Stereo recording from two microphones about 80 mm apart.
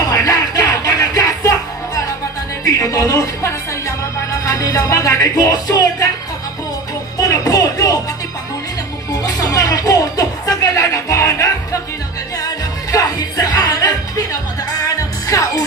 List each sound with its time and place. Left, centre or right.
0.1 s music: left
2.6 s music: left
5.3 s speech: left
7.2 s music: left
9.1 s music: left
12.9 s music: left